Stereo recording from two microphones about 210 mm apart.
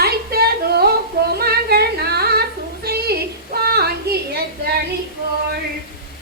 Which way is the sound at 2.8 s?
50° right (ahead or behind).